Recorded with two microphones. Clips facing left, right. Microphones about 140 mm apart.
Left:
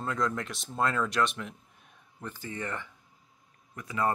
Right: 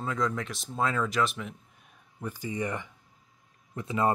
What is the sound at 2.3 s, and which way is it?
A man's voice, 15° right (ahead or behind).